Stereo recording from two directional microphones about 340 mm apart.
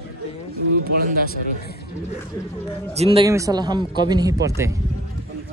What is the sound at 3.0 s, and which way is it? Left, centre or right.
A man's voice, centre.